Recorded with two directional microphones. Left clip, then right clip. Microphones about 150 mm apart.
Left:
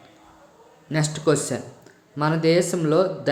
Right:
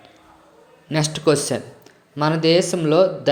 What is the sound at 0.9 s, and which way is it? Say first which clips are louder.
Speech: right 3 dB; 15° right (ahead or behind).